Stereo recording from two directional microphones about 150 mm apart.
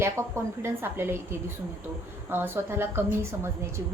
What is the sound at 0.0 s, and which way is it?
A woman's voice, 15° right (ahead or behind).